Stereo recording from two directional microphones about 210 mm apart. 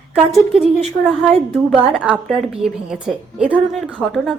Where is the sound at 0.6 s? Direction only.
Centre (ahead or behind).